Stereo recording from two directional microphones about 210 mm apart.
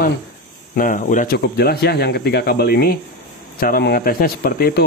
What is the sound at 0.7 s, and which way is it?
Speech, 40° left (ahead or behind).